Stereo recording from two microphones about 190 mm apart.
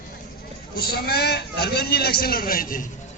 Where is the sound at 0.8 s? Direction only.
55° left (ahead or behind).